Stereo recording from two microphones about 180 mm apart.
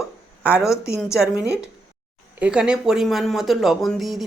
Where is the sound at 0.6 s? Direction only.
15° left (ahead or behind).